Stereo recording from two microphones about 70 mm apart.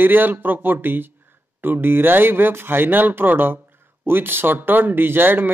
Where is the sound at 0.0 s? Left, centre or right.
Right.